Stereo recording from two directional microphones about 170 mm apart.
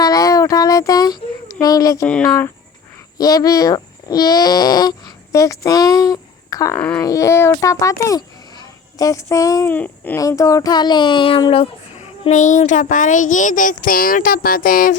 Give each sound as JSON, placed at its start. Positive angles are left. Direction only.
{"t": 0.0, "sound": "a sound", "side_deg": 20}
{"t": 1.6, "sound": "speech", "side_deg": 20}
{"t": 2.0, "sound": "speech", "side_deg": 5}
{"t": 3.2, "sound": "speech", "side_deg": 20}
{"t": 6.7, "sound": "wail", "side_deg": 10}
{"t": 7.0, "sound": "a child's voice", "side_deg": 20}
{"t": 9.7, "sound": "a child's voice", "side_deg": 10}